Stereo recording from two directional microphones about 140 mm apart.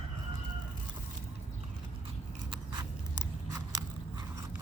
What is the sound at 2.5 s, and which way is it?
Biting, 30° right (ahead or behind).